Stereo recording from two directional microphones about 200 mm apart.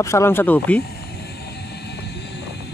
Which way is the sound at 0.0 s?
15° left (ahead or behind).